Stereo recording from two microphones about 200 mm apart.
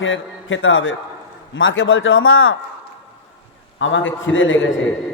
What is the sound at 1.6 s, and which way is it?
Speech, 75° left (ahead or behind).